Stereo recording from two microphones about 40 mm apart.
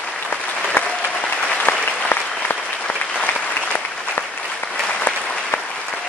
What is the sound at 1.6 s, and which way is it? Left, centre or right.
Applause, left.